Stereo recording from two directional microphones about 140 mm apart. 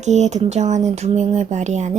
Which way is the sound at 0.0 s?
55° right (ahead or behind).